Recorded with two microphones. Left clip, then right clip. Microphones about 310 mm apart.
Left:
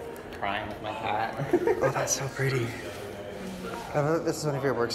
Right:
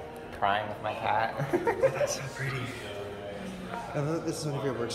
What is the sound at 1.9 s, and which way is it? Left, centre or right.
Speech, centre.